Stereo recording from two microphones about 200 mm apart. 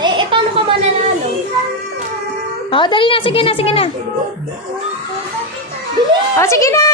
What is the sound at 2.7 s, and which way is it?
A woman's voice, 25° left (ahead or behind).